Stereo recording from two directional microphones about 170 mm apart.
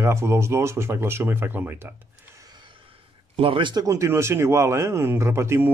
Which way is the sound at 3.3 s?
30° right (ahead or behind).